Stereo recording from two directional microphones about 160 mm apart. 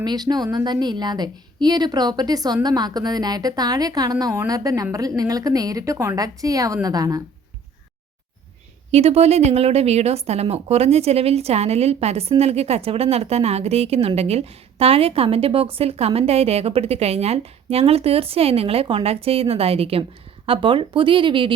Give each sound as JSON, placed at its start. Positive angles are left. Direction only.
{"t": 0.0, "sound": "a woman's voice", "side_deg": -25}
{"t": 8.9, "sound": "a woman's voice", "side_deg": -40}